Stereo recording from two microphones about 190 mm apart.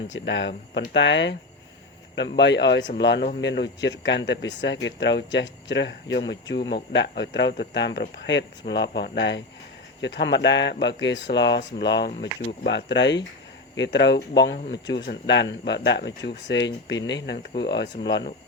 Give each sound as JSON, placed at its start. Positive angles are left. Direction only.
{"t": 0.1, "sound": "speech", "side_deg": 75}
{"t": 2.4, "sound": "speech", "side_deg": 65}